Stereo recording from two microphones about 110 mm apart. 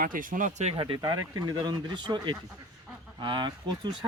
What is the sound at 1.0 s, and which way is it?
Speech, 40° right (ahead or behind).